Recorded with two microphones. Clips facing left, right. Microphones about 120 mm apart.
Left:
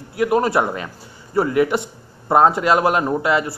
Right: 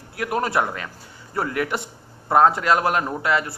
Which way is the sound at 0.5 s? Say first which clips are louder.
Left 4 dB; 15° left (ahead or behind).